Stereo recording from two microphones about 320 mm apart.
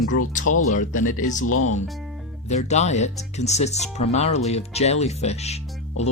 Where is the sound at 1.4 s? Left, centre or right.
Left.